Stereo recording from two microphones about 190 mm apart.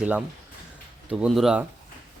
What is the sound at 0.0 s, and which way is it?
Speech, 5° right (ahead or behind).